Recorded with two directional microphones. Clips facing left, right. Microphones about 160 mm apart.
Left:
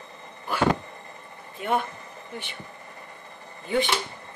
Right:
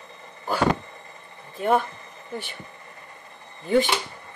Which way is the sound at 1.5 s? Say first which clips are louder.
Right 5 dB; 40° right (ahead or behind).